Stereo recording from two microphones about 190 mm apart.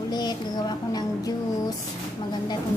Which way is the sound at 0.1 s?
20° left (ahead or behind).